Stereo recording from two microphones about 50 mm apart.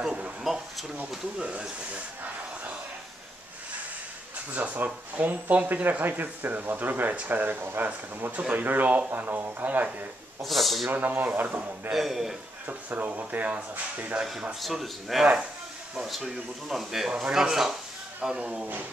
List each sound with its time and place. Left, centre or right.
0.4 s a sound: centre
1.4 s speech: right
4.5 s speech: right
8.3 s speech: right
10.4 s speech: centre
10.9 s speech: right
11.9 s speech: centre
12.6 s speech: right
14.5 s speech: centre
18.4 s speech: right